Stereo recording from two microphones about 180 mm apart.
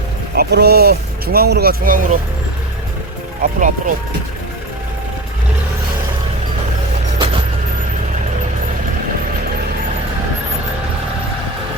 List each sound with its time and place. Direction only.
0.3 s speech: 60° right (ahead or behind)
3.4 s speech: 45° right (ahead or behind)